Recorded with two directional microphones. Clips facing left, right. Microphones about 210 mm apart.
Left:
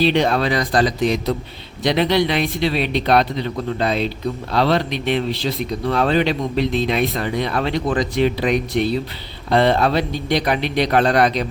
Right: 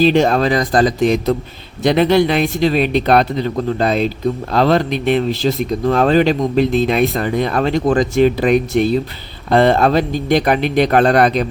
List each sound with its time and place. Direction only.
0.0 s speech: 45° right (ahead or behind)